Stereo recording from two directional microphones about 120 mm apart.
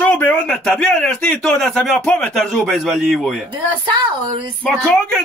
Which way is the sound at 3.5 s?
40° right (ahead or behind).